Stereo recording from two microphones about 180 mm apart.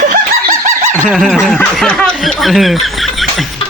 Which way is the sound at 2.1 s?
Centre (ahead or behind).